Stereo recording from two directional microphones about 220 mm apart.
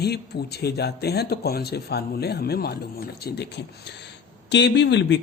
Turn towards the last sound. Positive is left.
turn(degrees=55)  # may be behind; listen again after turning